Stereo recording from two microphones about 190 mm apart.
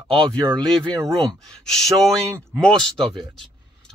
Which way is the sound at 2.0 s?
Centre (ahead or behind).